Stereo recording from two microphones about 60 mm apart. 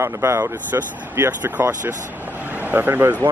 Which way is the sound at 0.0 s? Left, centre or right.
Right.